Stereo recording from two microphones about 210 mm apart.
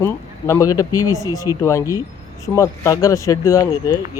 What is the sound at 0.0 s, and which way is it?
Speech, 15° left (ahead or behind).